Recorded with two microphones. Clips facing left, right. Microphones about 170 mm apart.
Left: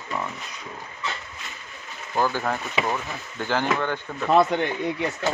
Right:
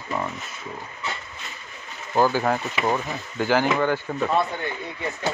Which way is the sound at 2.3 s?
10° right (ahead or behind).